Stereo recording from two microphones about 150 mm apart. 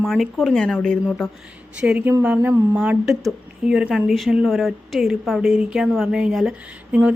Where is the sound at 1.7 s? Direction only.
10° right (ahead or behind).